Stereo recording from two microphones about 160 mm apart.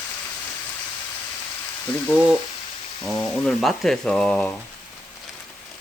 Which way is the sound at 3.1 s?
5° left (ahead or behind).